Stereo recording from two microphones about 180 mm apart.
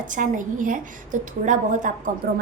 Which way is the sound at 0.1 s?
45° right (ahead or behind).